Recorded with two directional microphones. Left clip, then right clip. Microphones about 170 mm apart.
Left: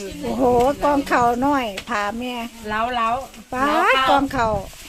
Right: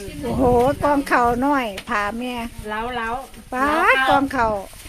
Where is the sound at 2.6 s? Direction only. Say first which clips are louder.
Left 5 dB; 85° left.